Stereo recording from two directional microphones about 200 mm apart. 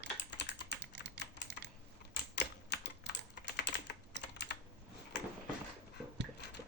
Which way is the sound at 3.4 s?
60° left (ahead or behind).